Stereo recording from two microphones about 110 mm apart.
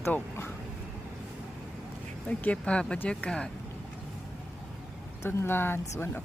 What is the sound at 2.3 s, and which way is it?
Speech, 10° left (ahead or behind).